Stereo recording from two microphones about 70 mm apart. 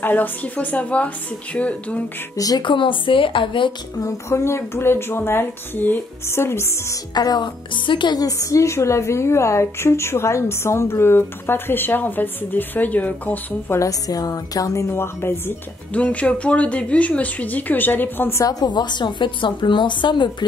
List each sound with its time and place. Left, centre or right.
0.0 s speech: left
2.3 s a woman's voice: left
4.0 s a woman's voice: left
6.2 s a woman's voice: left
7.2 s speech: left
8.3 s a woman's voice: left
13.8 s a woman's voice: left
15.0 s a woman's voice: left
15.9 s speech: centre
18.4 s a woman's voice: left